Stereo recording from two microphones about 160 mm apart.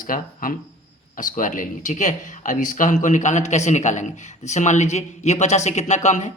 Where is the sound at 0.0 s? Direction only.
60° left (ahead or behind).